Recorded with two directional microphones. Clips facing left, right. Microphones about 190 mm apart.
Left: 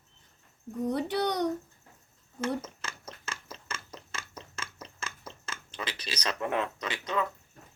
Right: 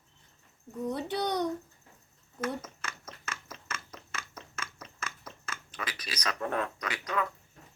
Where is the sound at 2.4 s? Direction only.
30° left (ahead or behind).